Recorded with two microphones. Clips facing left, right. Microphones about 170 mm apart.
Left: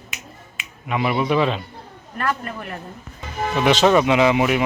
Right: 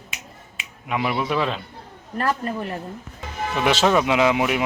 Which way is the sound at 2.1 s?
30° right (ahead or behind).